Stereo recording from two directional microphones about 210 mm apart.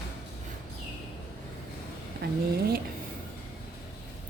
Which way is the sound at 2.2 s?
50° right (ahead or behind).